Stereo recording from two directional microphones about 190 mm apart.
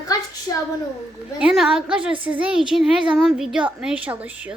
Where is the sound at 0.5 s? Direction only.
20° left (ahead or behind).